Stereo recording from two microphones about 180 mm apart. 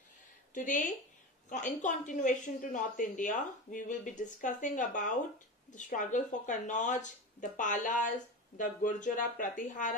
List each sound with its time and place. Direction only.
1.5 s a woman's voice: 45° left (ahead or behind)